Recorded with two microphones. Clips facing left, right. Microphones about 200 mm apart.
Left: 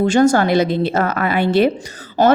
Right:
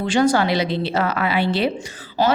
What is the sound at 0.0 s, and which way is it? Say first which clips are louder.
A woman's voice: left 4 dB; 45° left (ahead or behind).